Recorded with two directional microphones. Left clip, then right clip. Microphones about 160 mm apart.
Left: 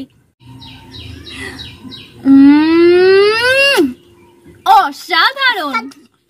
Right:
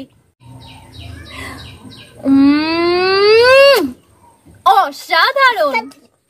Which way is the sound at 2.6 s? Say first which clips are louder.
Left 6 dB; 30° right (ahead or behind).